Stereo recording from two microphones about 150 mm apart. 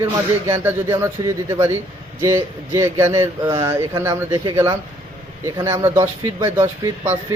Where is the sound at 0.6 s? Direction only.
15° right (ahead or behind).